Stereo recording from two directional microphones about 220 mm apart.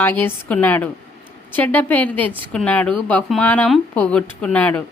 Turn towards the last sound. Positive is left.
turn(degrees=5)  # may be behind; listen again after turning